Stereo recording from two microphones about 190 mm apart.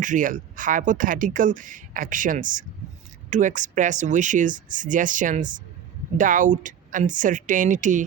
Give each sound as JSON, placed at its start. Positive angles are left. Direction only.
{"t": 0.0, "sound": "speech", "side_deg": -45}